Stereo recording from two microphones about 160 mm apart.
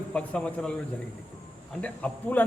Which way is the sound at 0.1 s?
5° left (ahead or behind).